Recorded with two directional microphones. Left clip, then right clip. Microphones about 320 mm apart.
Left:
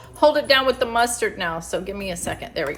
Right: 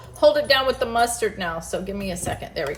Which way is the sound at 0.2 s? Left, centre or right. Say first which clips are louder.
Left 1 dB; left.